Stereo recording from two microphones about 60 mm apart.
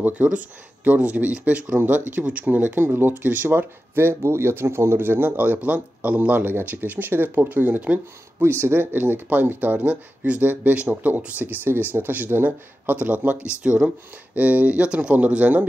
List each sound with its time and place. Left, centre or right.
0.0 s speech: right
2.8 s speech: right
8.4 s speech: right
13.5 s speech: centre